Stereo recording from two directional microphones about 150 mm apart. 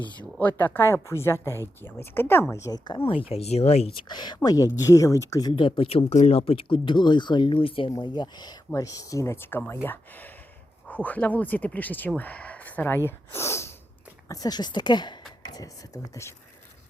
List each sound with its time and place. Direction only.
0.2 s speech: 10° left (ahead or behind)